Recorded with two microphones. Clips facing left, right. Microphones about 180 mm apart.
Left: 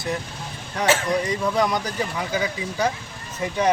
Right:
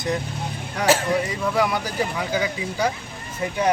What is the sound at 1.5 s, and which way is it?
Speech, 5° right (ahead or behind).